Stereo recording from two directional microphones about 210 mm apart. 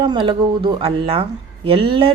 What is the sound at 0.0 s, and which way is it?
Speech, 25° right (ahead or behind).